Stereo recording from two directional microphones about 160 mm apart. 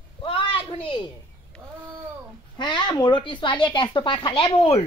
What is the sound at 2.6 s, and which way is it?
Speech, 30° left (ahead or behind).